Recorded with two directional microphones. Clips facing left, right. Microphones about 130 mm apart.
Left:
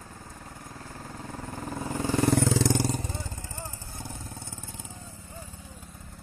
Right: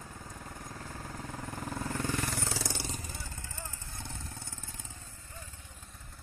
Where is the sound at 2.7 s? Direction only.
45° left (ahead or behind).